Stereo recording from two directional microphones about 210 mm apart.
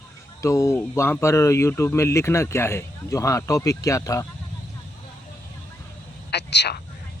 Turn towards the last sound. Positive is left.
turn(degrees=55)  # may be behind; listen again after turning